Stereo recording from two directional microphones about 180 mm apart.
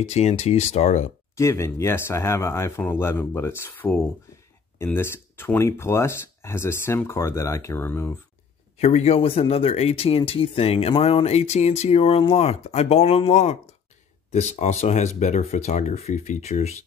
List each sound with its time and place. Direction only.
0.0 s speech: 40° left (ahead or behind)
1.3 s speech: 15° left (ahead or behind)
8.7 s speech: 35° left (ahead or behind)